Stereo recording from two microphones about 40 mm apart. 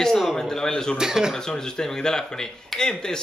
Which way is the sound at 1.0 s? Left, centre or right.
Centre.